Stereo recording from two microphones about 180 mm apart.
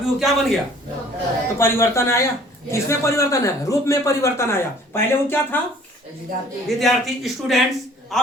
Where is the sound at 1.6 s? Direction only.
15° left (ahead or behind).